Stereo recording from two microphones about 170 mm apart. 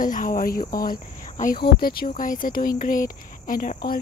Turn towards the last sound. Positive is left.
turn(degrees=55)  # may be behind; listen again after turning